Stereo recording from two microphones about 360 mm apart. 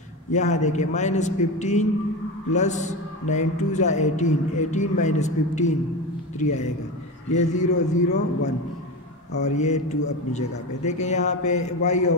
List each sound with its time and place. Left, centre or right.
0.3 s a man's voice: centre
7.3 s a man's voice: centre
9.3 s a man's voice: centre